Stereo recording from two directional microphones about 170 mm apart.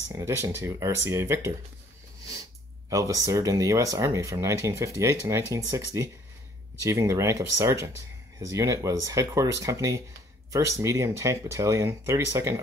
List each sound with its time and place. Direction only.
0.1 s speech: 15° right (ahead or behind)
2.9 s speech: 20° right (ahead or behind)